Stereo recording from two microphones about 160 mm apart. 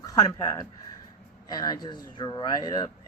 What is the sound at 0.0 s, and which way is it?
Speech, 20° left (ahead or behind).